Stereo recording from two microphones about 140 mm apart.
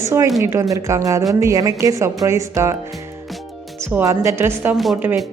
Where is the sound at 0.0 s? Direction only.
20° right (ahead or behind).